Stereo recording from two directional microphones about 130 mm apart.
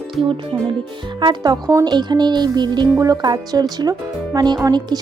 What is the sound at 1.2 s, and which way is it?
Speech, 35° right (ahead or behind).